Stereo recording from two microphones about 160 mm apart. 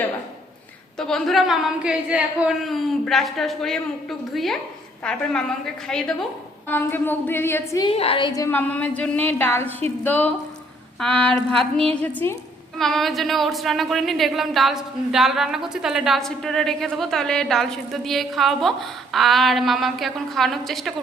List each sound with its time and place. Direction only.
0.9 s a woman's voice: 5° left (ahead or behind)
7.9 s a woman's voice: 35° left (ahead or behind)
8.3 s a woman's voice: 15° left (ahead or behind)
12.8 s speech: centre (ahead or behind)